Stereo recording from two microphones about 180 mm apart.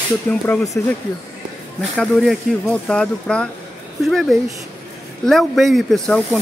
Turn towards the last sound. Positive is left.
turn(degrees=0)  # may be behind; listen again after turning